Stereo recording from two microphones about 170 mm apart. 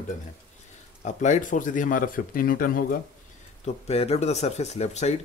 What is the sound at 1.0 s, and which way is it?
Speech, 45° left (ahead or behind).